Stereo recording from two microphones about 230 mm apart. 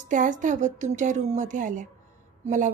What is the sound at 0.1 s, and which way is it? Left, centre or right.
A woman's voice, right.